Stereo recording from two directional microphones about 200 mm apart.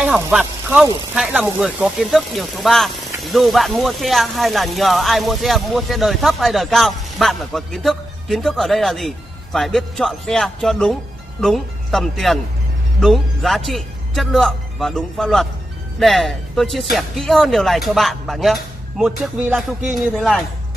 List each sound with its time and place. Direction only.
0.0 s speech: 5° right (ahead or behind)